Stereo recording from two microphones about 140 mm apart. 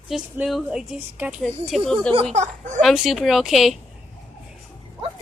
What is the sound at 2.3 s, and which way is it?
Speech, 55° right (ahead or behind).